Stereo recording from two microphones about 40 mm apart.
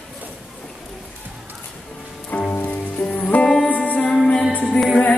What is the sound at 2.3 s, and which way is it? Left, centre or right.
Music, left.